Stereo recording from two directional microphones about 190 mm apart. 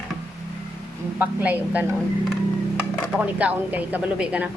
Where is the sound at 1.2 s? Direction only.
10° right (ahead or behind).